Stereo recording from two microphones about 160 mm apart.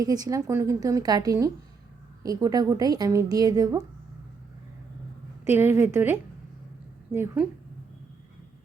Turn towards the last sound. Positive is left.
turn(degrees=-10)  # may be behind; listen again after turning